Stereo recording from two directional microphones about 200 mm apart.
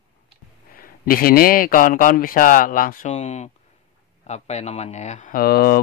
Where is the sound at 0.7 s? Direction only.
45° left (ahead or behind).